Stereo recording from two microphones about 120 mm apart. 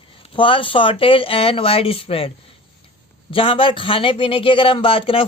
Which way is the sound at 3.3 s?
50° left (ahead or behind).